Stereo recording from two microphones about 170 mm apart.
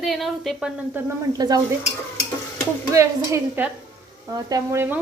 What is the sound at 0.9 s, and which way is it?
Speech, 20° right (ahead or behind).